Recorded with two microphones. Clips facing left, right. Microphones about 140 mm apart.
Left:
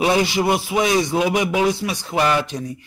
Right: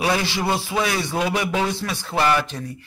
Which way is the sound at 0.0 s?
20° left (ahead or behind).